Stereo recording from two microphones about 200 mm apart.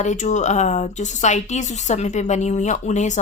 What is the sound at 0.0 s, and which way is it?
Speech, 35° left (ahead or behind).